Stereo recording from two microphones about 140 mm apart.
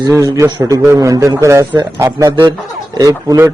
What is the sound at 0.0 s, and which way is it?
A man's voice, 25° right (ahead or behind).